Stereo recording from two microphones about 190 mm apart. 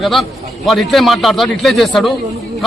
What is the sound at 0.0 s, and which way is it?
A man's voice, centre (ahead or behind).